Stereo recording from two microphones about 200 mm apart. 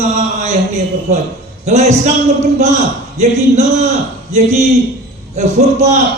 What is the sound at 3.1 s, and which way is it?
A man's voice, 35° right (ahead or behind).